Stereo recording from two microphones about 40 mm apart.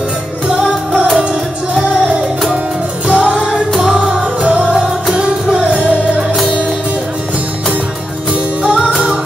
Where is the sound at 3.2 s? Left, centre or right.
Right.